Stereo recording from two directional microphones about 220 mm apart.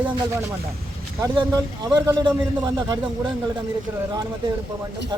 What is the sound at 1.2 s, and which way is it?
A man's voice, 15° right (ahead or behind).